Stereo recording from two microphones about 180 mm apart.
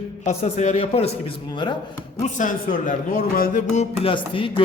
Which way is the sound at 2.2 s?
45° left (ahead or behind).